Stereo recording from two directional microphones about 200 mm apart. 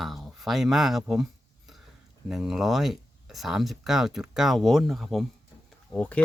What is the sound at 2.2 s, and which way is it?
Speech, centre (ahead or behind).